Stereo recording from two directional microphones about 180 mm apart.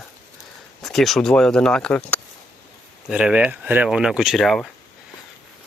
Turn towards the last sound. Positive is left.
turn(degrees=0)  # may be behind; listen again after turning